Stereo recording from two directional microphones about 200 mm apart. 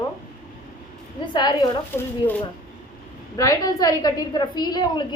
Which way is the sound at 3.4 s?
20° left (ahead or behind).